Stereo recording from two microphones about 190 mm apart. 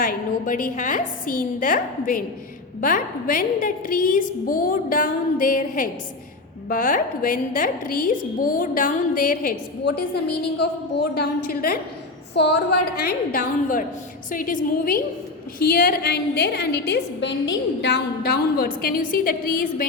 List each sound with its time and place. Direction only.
0.0 s a woman's voice: 45° left (ahead or behind)
12.3 s a woman's voice: 60° left (ahead or behind)
13.0 s a woman's voice: 50° left (ahead or behind)